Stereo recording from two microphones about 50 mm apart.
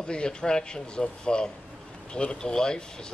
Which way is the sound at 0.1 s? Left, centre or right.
Centre.